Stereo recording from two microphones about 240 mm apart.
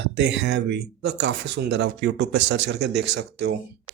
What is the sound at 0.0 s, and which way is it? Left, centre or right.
Speech, right.